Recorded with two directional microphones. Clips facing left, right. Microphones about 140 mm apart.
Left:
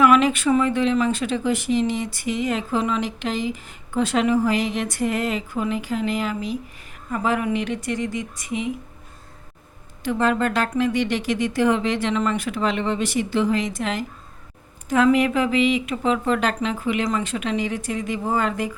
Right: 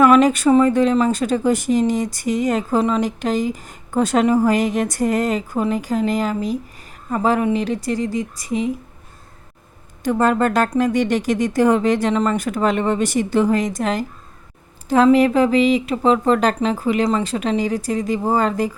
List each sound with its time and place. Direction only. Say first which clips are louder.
0.0 s speech: right 4 dB; 40° right (ahead or behind)
10.0 s speech: right 4 dB; 45° right (ahead or behind)